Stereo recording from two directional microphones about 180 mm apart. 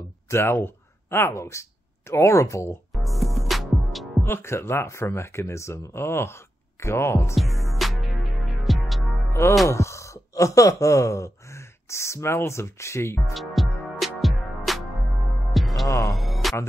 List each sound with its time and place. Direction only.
0.3 s speech: 15° left (ahead or behind)
2.9 s music: centre (ahead or behind)
4.2 s speech: 15° left (ahead or behind)
7.3 s music: centre (ahead or behind)
9.3 s speech: 15° left (ahead or behind)
13.3 s music: centre (ahead or behind)